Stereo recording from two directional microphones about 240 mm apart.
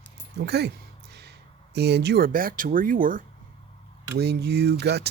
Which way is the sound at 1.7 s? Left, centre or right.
Right.